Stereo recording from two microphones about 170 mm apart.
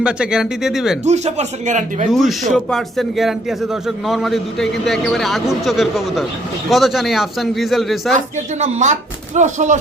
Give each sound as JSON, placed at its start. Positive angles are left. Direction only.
{"t": 0.0, "sound": "a man's voice", "side_deg": -5}
{"t": 1.0, "sound": "speech", "side_deg": -40}
{"t": 2.0, "sound": "a man's voice", "side_deg": 0}
{"t": 8.1, "sound": "speech", "side_deg": -45}